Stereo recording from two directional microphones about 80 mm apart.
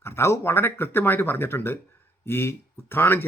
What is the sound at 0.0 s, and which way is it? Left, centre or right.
Speech, left.